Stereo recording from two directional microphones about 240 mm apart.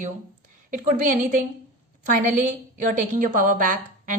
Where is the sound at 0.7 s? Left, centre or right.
Right.